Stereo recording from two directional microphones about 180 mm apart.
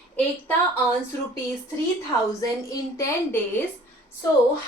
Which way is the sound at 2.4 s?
20° left (ahead or behind).